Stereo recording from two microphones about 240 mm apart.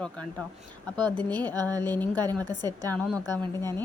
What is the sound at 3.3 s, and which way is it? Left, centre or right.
Speech, centre.